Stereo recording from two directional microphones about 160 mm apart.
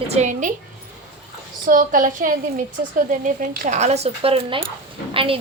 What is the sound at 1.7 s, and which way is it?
A woman's voice, 55° right (ahead or behind).